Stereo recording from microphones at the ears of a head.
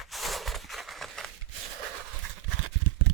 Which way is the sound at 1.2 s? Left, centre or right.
Right.